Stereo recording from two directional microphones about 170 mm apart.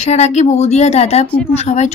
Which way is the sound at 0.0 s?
40° left (ahead or behind).